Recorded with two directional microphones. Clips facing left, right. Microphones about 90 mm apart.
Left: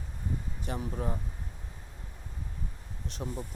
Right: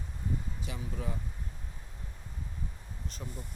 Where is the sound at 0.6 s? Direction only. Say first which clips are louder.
Left 5 dB; 55° left (ahead or behind).